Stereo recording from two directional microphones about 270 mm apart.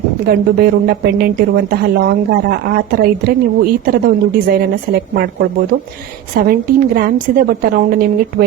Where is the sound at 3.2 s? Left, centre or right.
Right.